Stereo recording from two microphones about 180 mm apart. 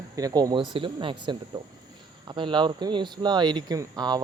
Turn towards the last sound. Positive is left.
turn(degrees=-20)  # may be behind; listen again after turning